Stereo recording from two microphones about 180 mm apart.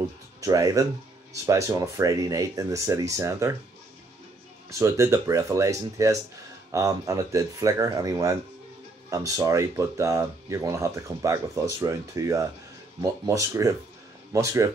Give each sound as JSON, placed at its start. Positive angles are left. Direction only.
{"t": 0.4, "sound": "speech", "side_deg": -20}
{"t": 4.6, "sound": "speech", "side_deg": -15}